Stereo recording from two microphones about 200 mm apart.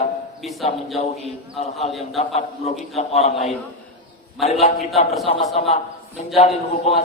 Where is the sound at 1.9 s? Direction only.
Centre (ahead or behind).